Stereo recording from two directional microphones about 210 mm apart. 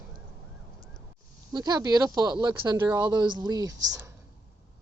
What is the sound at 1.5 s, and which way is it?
Speech, 20° right (ahead or behind).